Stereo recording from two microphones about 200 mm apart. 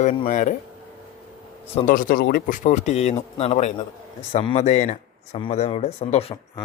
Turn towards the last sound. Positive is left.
turn(degrees=30)  # may be behind; listen again after turning